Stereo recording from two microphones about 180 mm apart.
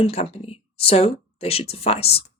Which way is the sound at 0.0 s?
35° left (ahead or behind).